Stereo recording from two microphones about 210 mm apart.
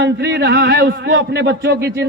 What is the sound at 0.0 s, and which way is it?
A man's voice, 55° right (ahead or behind).